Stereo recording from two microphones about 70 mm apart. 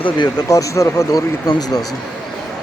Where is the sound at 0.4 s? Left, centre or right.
Left.